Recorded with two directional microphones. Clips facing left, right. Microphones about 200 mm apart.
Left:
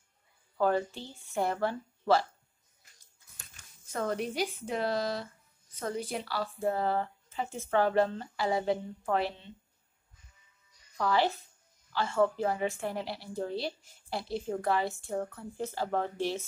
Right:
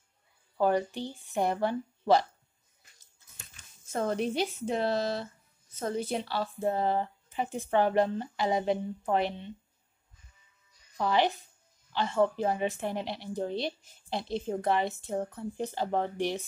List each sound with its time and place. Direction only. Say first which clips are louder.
0.6 s speech: right 2 dB; 15° right (ahead or behind)
3.3 s a woman's voice: right 2 dB; 25° right (ahead or behind)
11.0 s a woman's voice: right 1 dB; 20° right (ahead or behind)